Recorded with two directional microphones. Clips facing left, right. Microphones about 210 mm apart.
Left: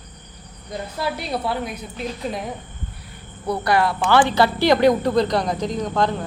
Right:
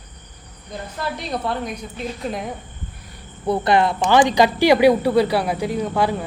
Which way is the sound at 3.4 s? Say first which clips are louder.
Right 2 dB; 25° right (ahead or behind).